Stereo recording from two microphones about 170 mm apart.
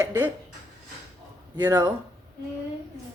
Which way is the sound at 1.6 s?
20° right (ahead or behind).